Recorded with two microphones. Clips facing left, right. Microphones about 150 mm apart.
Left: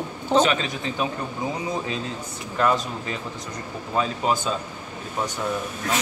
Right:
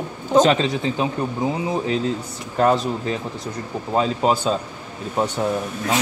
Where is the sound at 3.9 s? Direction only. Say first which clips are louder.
Right 4 dB; 30° right (ahead or behind).